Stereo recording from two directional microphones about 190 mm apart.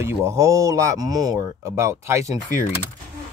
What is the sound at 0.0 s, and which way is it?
Speech, 15° right (ahead or behind).